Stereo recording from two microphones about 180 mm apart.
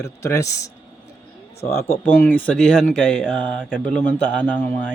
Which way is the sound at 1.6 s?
55° left (ahead or behind).